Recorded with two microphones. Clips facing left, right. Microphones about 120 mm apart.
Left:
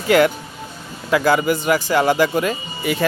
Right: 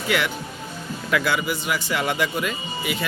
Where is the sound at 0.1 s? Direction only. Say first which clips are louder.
Left 11 dB; 40° left (ahead or behind).